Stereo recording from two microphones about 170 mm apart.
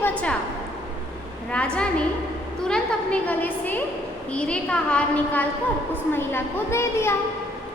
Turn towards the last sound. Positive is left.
turn(degrees=15)  # may be behind; listen again after turning